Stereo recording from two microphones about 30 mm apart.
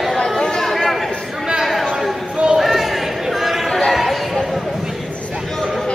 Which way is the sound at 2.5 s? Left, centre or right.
Centre.